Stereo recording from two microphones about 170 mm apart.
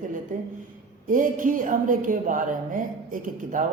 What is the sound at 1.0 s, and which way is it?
Speech, 50° right (ahead or behind).